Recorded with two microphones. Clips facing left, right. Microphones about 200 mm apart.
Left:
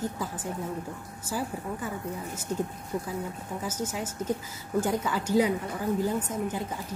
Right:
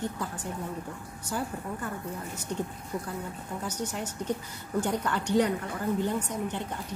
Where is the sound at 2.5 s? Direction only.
40° left (ahead or behind).